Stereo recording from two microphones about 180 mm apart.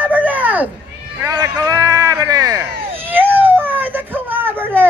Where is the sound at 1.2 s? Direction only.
20° right (ahead or behind).